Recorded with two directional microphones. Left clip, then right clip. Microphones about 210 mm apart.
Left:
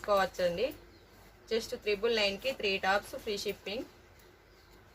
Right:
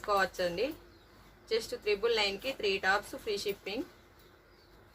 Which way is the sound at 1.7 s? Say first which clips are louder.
Right 1 dB; 20° right (ahead or behind).